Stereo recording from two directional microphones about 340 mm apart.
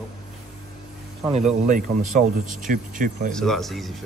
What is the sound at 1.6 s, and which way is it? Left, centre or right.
Speech, right.